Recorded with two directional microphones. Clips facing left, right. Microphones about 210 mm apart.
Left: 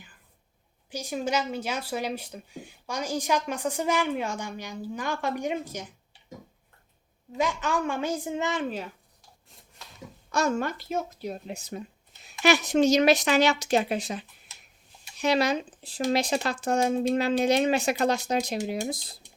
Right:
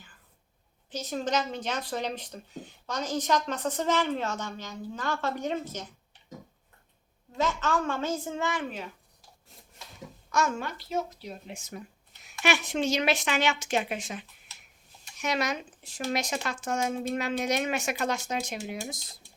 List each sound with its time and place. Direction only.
0.9 s speech: 10° left (ahead or behind)
7.3 s speech: 15° left (ahead or behind)
10.3 s speech: 35° left (ahead or behind)
11.7 s a sound: 25° left (ahead or behind)
12.4 s speech: 40° left (ahead or behind)